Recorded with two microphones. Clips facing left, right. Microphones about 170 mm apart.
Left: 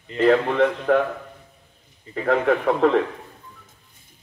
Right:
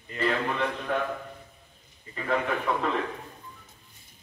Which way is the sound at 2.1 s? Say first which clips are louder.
Left 8 dB; 75° left (ahead or behind).